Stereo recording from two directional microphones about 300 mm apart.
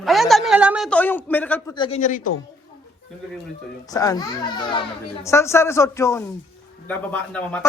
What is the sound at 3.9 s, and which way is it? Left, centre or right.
A man's voice, centre.